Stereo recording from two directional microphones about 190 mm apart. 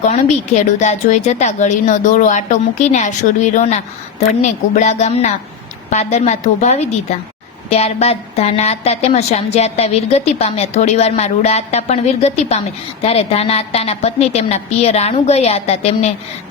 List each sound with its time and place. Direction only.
0.1 s a woman's voice: 40° left (ahead or behind)